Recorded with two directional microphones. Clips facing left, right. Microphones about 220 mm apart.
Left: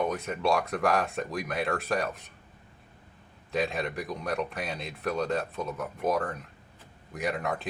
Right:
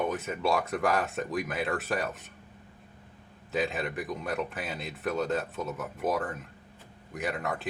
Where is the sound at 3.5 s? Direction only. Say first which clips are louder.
Left 1 dB; centre (ahead or behind).